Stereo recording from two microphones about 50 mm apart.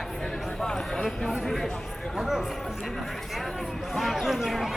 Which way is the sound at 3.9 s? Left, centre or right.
Centre.